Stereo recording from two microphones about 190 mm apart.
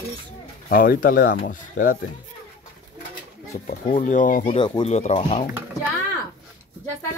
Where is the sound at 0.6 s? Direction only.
50° left (ahead or behind).